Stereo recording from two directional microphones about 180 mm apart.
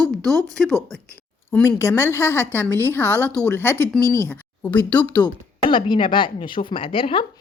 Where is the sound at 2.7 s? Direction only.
15° right (ahead or behind).